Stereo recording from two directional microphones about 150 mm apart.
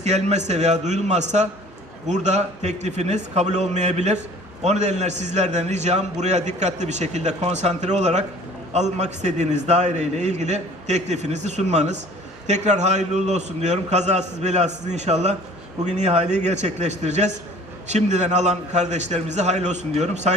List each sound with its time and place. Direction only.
0.0 s a man's voice: 50° right (ahead or behind)